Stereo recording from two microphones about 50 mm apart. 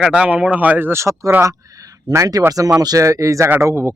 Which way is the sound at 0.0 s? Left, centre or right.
Right.